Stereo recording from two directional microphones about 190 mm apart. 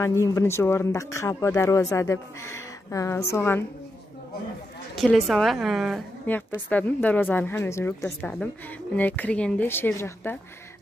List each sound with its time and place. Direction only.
0.0 s a woman's voice: 15° left (ahead or behind)
4.9 s a woman's voice: centre (ahead or behind)